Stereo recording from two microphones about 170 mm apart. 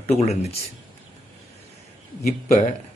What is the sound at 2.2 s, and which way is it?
Speech, 50° left (ahead or behind).